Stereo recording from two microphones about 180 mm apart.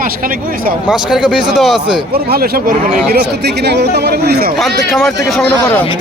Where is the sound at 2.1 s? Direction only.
55° right (ahead or behind).